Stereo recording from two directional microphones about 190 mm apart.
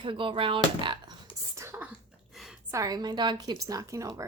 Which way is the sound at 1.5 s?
15° right (ahead or behind).